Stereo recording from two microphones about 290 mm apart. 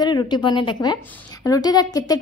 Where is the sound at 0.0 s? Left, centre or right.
Centre.